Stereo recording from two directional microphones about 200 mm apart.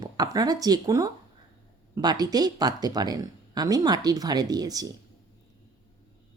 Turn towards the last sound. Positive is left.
turn(degrees=-20)  # may be behind; listen again after turning